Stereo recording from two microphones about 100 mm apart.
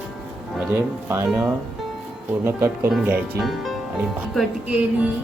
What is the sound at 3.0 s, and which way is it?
Music, 15° right (ahead or behind).